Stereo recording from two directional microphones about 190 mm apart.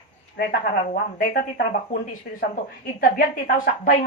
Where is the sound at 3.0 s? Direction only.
50° left (ahead or behind).